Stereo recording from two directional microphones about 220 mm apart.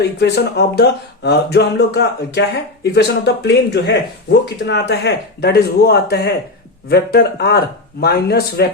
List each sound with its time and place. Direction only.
0.0 s speech: 50° left (ahead or behind)